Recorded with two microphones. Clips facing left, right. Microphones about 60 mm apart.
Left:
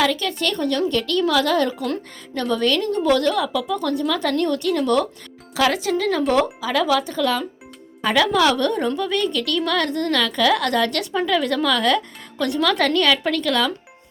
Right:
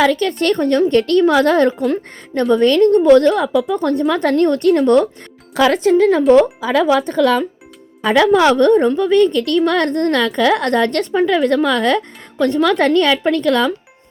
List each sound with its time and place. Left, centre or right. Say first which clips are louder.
0.0 s a woman's voice: right 6 dB; right
7.2 s speech: right 7 dB; right
8.0 s a woman's voice: right 6 dB; right
9.1 s a woman's voice: right 9 dB; right